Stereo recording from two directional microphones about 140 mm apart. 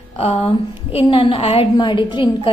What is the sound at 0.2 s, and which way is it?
A woman's voice, 45° left (ahead or behind).